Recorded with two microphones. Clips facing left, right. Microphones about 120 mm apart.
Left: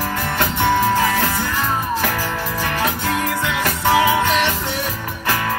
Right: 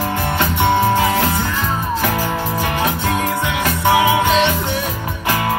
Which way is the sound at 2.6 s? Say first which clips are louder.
Even; 15° right (ahead or behind).